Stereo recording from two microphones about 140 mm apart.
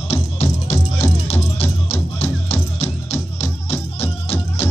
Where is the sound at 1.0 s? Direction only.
15° left (ahead or behind).